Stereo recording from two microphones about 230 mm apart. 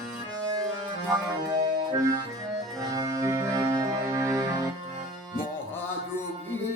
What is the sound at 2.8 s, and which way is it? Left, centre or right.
Music, centre.